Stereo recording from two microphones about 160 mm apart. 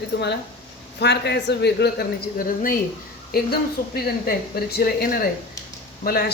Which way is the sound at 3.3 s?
70° left (ahead or behind).